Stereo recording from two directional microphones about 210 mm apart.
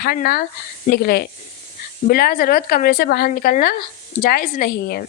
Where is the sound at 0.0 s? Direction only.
45° left (ahead or behind).